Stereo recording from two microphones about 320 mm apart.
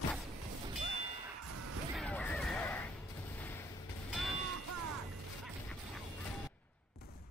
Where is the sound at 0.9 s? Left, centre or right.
Centre.